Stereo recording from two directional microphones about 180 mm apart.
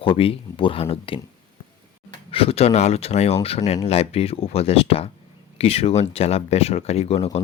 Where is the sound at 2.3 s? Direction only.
30° left (ahead or behind).